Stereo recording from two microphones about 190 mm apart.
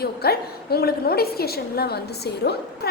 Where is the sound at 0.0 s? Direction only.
55° left (ahead or behind).